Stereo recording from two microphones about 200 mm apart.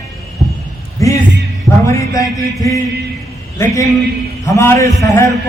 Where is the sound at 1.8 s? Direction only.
15° left (ahead or behind).